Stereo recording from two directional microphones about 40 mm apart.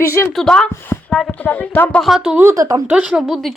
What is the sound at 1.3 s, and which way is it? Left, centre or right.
Speech, left.